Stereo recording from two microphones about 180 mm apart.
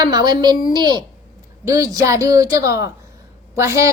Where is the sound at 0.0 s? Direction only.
25° right (ahead or behind).